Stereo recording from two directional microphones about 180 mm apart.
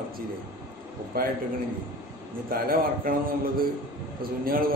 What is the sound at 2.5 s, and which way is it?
A man's voice, 50° right (ahead or behind).